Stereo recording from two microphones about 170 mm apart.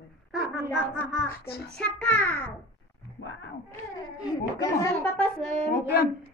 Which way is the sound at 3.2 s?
90° left.